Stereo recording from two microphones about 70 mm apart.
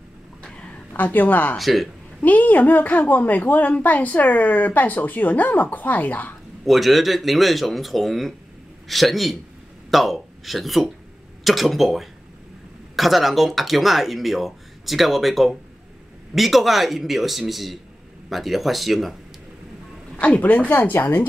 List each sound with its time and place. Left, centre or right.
0.4 s a sound: centre
1.6 s speech: centre
2.2 s a woman's voice: left
6.6 s speech: centre
20.2 s a woman's voice: left